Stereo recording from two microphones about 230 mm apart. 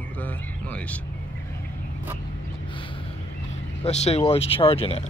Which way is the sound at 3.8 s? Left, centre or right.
Left.